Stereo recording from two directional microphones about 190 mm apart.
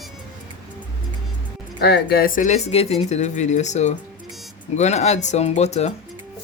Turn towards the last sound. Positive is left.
turn(degrees=35)  # may be behind; listen again after turning